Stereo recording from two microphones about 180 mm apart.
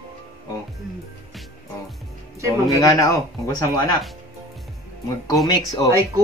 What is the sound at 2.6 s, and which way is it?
Speech, 20° left (ahead or behind).